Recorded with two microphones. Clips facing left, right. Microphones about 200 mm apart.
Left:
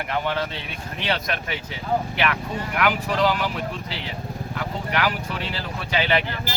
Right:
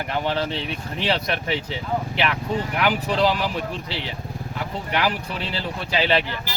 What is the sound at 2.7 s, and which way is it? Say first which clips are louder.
Speech: left 1 dB; 30° right (ahead or behind).